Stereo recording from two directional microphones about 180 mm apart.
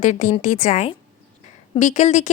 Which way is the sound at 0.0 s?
40° left (ahead or behind).